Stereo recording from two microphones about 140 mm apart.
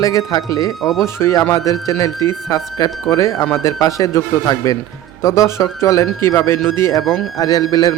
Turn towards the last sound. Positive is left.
turn(degrees=30)  # may be behind; listen again after turning